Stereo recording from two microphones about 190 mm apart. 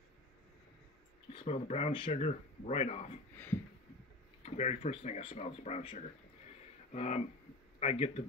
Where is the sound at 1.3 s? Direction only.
35° left (ahead or behind).